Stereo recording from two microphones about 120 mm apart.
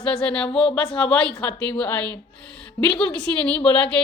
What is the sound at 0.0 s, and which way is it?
A woman's voice, 10° left (ahead or behind).